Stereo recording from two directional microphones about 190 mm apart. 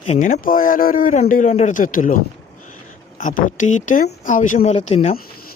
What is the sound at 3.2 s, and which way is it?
Speech, 40° left (ahead or behind).